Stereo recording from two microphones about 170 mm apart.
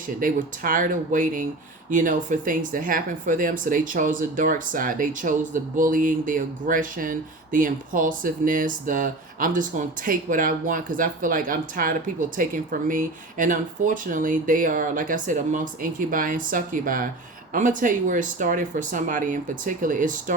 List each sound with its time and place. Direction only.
0.2 s speech: 55° right (ahead or behind)